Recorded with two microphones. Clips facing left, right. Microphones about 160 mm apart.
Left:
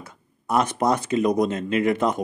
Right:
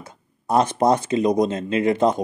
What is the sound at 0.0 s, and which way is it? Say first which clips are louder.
Speech: right 2 dB; 30° right (ahead or behind).